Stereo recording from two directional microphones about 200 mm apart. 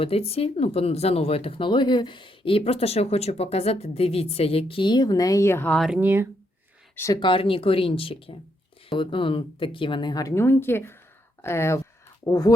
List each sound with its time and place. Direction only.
0.0 s speech: 30° left (ahead or behind); by 6.2 s 10° right (ahead or behind)
6.9 s speech: 15° left (ahead or behind)